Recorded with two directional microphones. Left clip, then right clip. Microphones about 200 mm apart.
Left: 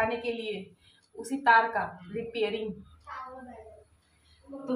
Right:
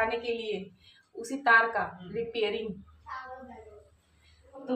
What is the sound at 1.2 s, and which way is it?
Speech, 20° right (ahead or behind).